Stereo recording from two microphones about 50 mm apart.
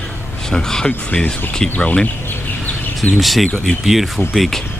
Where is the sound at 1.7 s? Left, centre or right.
Left.